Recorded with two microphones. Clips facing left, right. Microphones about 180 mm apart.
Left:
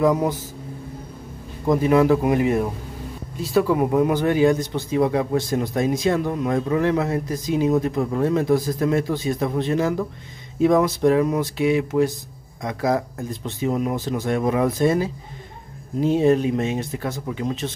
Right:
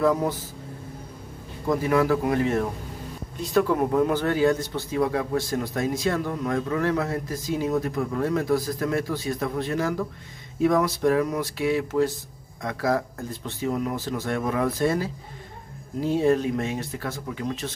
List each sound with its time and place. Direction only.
0.0 s speech: 15° left (ahead or behind)
1.7 s a man's voice: 20° left (ahead or behind)